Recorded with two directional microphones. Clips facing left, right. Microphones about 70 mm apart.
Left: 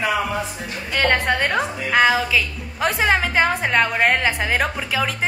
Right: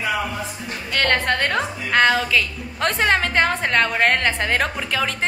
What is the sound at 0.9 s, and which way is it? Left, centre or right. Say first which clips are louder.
A woman's voice: left 1 dB; centre.